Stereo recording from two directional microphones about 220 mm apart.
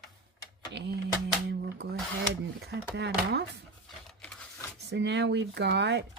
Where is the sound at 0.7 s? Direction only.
50° right (ahead or behind).